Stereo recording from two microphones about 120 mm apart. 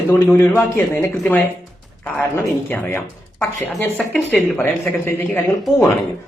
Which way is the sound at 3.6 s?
10° left (ahead or behind).